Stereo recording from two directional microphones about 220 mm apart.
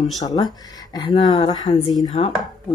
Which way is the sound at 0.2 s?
15° left (ahead or behind).